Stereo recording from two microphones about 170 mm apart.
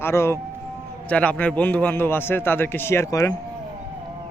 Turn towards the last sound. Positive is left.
turn(degrees=20)  # may be behind; listen again after turning